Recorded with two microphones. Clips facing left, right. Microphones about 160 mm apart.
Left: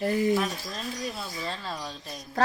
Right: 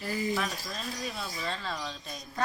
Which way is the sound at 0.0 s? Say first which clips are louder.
Left 8 dB; 60° left (ahead or behind).